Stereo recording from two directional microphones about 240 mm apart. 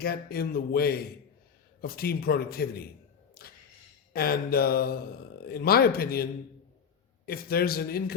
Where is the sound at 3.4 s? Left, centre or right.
Left.